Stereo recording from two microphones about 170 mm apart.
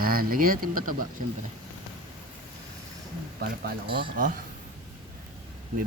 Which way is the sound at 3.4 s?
65° right (ahead or behind).